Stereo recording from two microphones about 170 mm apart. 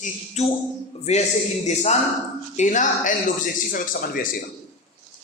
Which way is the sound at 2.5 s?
45° left (ahead or behind).